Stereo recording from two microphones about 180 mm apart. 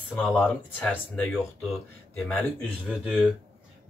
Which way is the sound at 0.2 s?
5° left (ahead or behind).